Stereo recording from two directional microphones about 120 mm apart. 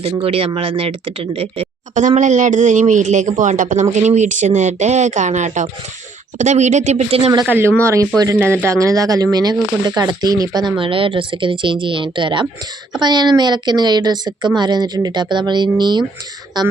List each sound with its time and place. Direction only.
0.0 s speech: 50° right (ahead or behind)
2.0 s speech: 90° right
3.9 s speech: 75° right (ahead or behind)
7.4 s speech: 15° right (ahead or behind); by 16.0 s 40° right (ahead or behind)